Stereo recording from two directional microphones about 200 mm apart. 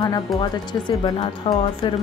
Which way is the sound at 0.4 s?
25° left (ahead or behind).